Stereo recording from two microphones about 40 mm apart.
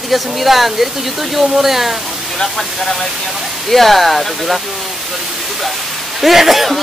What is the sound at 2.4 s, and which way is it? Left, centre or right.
Speech, centre.